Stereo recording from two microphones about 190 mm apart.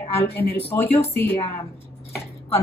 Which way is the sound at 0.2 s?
55° left (ahead or behind).